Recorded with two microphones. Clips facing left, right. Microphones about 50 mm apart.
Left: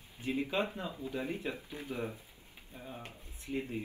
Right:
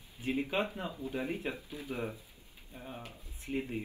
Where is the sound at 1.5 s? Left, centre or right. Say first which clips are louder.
Even; left.